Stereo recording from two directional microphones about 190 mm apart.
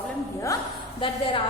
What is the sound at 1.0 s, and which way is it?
Speech, 25° left (ahead or behind).